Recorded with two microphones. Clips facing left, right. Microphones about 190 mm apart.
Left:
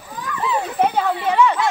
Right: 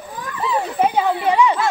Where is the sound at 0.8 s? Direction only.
10° right (ahead or behind).